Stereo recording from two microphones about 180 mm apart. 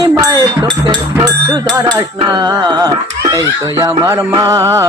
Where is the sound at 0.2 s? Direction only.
20° right (ahead or behind).